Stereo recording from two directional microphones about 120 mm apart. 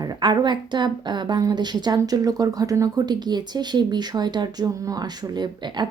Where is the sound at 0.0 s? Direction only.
35° right (ahead or behind).